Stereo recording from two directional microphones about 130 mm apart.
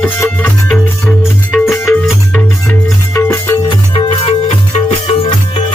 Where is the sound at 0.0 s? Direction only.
10° left (ahead or behind).